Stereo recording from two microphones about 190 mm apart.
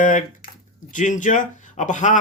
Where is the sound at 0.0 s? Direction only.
45° left (ahead or behind).